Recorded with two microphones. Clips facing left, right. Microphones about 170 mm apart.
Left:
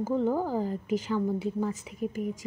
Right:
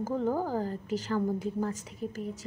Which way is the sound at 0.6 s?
10° left (ahead or behind).